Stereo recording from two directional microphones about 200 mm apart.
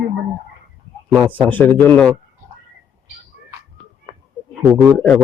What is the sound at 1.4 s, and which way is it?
Speech, 10° left (ahead or behind).